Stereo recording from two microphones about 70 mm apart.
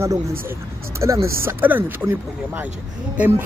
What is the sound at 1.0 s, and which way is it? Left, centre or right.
Speech, right.